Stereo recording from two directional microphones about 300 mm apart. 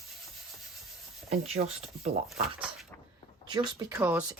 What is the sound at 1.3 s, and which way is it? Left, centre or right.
Speech, centre.